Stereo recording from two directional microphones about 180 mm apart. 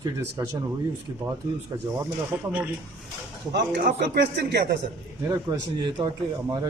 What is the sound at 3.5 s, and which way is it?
Speech, 65° right (ahead or behind).